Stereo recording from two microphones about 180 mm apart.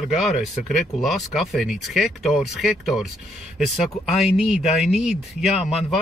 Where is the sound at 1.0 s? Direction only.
Centre (ahead or behind).